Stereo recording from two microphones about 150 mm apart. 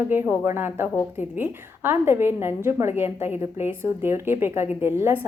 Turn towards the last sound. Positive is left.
turn(degrees=-15)  # may be behind; listen again after turning